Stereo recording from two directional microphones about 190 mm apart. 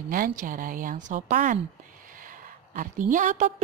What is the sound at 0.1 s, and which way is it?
A woman's voice, 45° right (ahead or behind).